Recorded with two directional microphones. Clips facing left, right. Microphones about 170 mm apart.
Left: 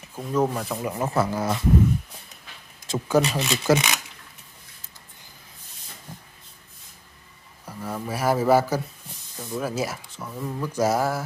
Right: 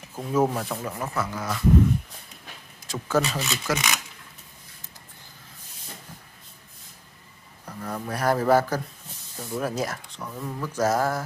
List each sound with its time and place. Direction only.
0.1 s speech: 5° right (ahead or behind)
0.7 s speech: 20° left (ahead or behind)
2.9 s speech: 15° left (ahead or behind)
3.6 s speech: 30° left (ahead or behind)
7.6 s speech: 5° left (ahead or behind)